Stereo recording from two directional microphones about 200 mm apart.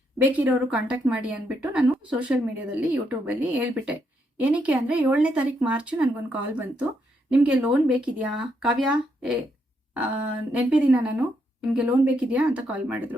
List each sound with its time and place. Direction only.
0.2 s speech: 10° right (ahead or behind)